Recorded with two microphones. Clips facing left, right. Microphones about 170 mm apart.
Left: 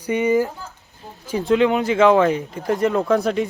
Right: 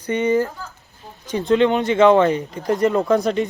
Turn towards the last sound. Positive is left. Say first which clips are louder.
# right 1 dB
turn(degrees=5)  # may be behind; listen again after turning